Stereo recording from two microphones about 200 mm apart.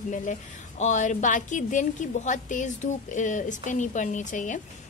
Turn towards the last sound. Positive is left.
turn(degrees=40)  # may be behind; listen again after turning